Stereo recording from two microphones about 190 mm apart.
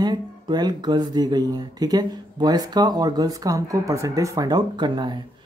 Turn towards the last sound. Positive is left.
turn(degrees=-25)  # may be behind; listen again after turning